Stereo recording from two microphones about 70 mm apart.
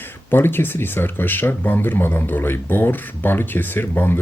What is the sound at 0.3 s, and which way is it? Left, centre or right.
Speech, left.